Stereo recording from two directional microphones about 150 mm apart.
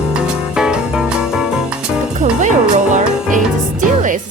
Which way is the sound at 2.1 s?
55° right (ahead or behind).